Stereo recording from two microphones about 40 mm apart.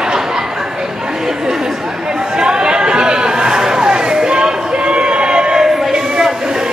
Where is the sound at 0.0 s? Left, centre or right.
Centre.